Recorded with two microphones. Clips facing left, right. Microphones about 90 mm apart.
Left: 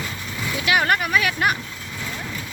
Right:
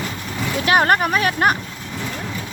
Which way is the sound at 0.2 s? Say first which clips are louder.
Right 4 dB; 35° right (ahead or behind).